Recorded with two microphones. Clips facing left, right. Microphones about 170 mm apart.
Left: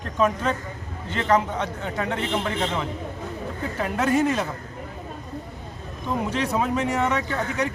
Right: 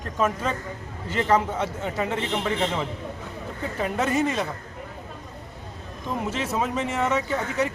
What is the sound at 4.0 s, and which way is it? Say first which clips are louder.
Speech: left 3 dB; centre (ahead or behind).